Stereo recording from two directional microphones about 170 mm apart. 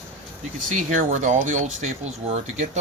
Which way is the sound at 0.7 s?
45° right (ahead or behind).